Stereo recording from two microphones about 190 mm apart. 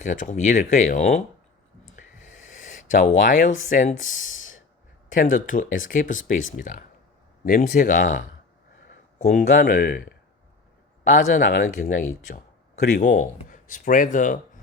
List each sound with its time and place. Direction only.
0.0 s speech: 40° left (ahead or behind)
2.0 s a sound: 40° left (ahead or behind)
3.7 s speech: 40° left (ahead or behind)
3.9 s speech: 90° left
5.1 s speech: 45° left (ahead or behind)